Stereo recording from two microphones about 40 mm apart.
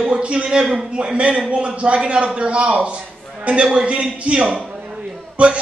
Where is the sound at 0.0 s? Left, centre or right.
Right.